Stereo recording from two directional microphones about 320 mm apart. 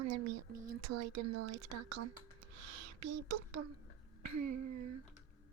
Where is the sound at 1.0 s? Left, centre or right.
Right.